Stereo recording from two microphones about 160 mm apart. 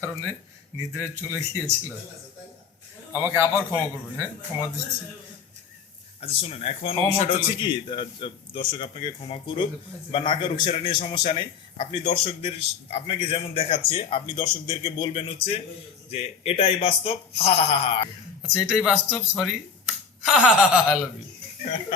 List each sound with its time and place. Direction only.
0.9 s speech: 15° right (ahead or behind)
3.1 s speech: 15° right (ahead or behind)
6.1 s a man's voice: 40° left (ahead or behind)
18.4 s speech: 5° right (ahead or behind)
21.6 s a man's voice: 40° left (ahead or behind)